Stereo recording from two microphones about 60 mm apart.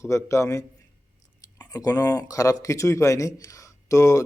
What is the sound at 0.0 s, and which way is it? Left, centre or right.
Speech, left.